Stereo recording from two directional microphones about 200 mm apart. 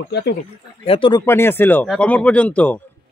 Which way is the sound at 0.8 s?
25° left (ahead or behind).